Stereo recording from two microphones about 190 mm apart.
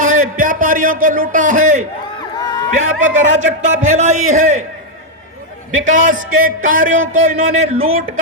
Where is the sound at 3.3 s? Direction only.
40° right (ahead or behind).